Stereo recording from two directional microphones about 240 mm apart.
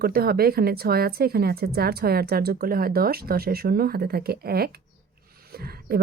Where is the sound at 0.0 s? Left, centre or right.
Right.